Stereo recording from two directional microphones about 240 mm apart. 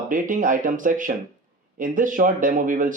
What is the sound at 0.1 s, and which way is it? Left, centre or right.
Speech, right.